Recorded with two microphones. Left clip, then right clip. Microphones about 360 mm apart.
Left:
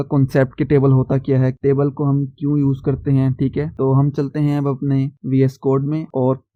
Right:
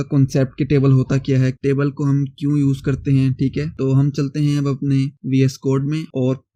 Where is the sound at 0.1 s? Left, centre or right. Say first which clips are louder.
Left 3 dB; left.